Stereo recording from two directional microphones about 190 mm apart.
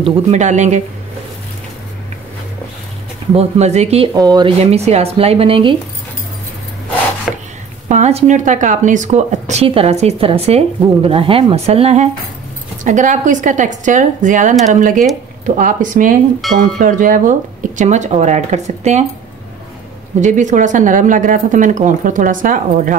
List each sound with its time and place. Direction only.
0.0 s speech: 35° right (ahead or behind)
3.3 s speech: 35° right (ahead or behind)
4.1 s speech: 20° right (ahead or behind)
7.3 s chopping: 5° right (ahead or behind)
7.9 s speech: 35° right (ahead or behind)
20.2 s speech: 40° right (ahead or behind)